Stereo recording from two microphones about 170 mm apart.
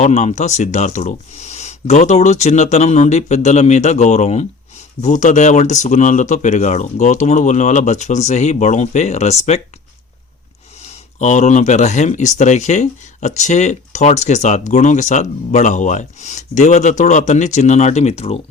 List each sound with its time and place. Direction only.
0.0 s speech: 40° left (ahead or behind)
10.8 s speech: 45° left (ahead or behind)